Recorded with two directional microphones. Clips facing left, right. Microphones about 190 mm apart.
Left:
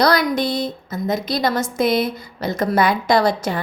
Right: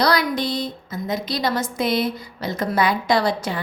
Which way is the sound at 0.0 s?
50° left (ahead or behind).